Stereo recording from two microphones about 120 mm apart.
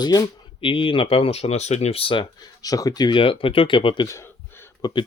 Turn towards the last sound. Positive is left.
turn(degrees=40)  # may be behind; listen again after turning